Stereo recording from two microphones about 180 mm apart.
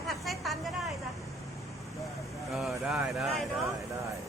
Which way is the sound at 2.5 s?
Centre (ahead or behind).